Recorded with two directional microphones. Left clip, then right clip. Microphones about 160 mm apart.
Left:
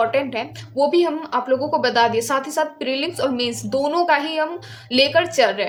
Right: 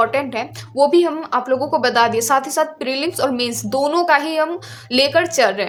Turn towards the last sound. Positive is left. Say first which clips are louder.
# right 1 dB
turn(degrees=-40)  # may be behind; listen again after turning